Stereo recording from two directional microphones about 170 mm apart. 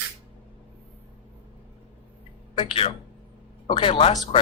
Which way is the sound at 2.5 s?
35° left (ahead or behind).